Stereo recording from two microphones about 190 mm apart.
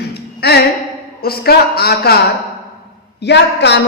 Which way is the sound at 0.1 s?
60° left (ahead or behind).